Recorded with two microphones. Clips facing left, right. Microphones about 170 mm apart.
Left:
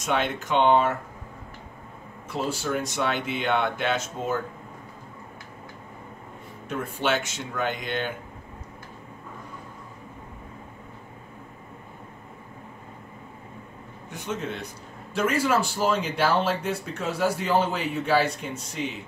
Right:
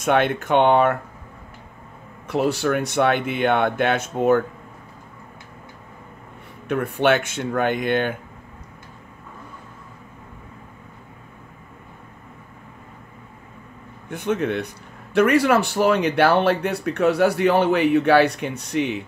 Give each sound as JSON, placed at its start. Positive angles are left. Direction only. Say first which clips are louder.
{"t": 0.0, "sound": "speech", "louder": "right 7 dB", "side_deg": -60}
{"t": 2.2, "sound": "speech", "louder": "right 8 dB", "side_deg": -65}
{"t": 6.7, "sound": "speech", "louder": "right 7 dB", "side_deg": -60}
{"t": 14.1, "sound": "speech", "louder": "right 9 dB", "side_deg": -60}